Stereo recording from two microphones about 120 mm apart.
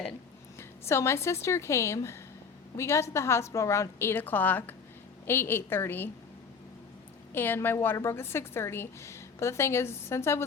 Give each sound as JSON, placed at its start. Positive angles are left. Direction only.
{"t": 0.9, "sound": "a woman's voice", "side_deg": 20}
{"t": 7.3, "sound": "a woman's voice", "side_deg": 20}